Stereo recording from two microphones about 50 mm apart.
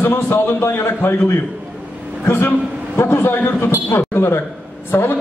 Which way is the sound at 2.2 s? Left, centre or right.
Left.